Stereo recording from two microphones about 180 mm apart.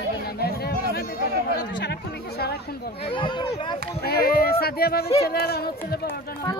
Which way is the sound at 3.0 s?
30° left (ahead or behind).